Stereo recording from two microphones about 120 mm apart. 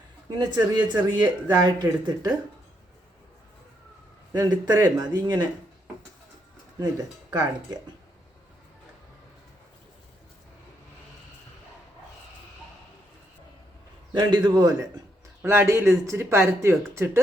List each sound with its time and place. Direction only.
0.3 s speech: 40° right (ahead or behind)
4.3 s speech: 30° right (ahead or behind)
14.1 s speech: 40° right (ahead or behind)
15.4 s speech: 20° right (ahead or behind)